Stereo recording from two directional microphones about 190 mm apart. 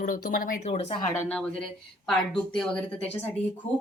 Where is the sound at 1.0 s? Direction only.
15° left (ahead or behind).